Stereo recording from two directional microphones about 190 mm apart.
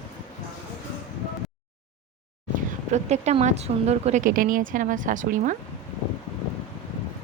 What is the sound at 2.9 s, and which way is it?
Speech, 35° right (ahead or behind).